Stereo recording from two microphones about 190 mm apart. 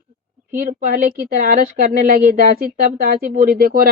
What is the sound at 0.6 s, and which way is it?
Speech, 45° right (ahead or behind).